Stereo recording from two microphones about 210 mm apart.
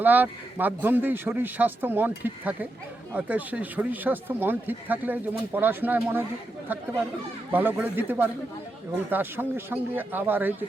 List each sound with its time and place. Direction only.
0.0 s speech: 10° right (ahead or behind)
7.5 s speech: 10° right (ahead or behind)